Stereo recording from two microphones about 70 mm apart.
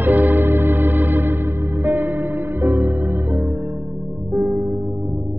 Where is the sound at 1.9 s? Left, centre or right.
Right.